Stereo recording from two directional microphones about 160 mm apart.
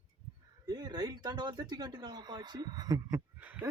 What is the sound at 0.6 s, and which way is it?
Speech, 25° right (ahead or behind).